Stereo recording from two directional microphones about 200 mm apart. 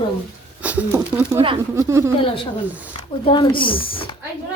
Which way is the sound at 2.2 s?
25° left (ahead or behind).